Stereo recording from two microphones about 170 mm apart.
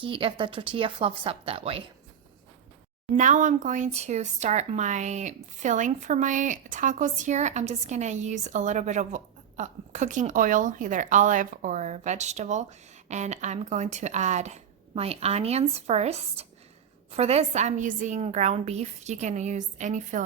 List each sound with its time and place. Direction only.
0.0 s speech: 30° right (ahead or behind)
3.2 s speech: 45° right (ahead or behind)